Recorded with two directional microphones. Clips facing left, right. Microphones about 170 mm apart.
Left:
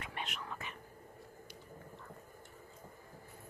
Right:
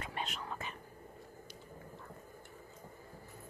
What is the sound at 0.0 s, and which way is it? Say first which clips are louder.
Whispering: right 2 dB; 35° right (ahead or behind).